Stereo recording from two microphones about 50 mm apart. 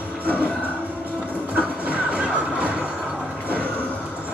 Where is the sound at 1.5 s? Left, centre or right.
Right.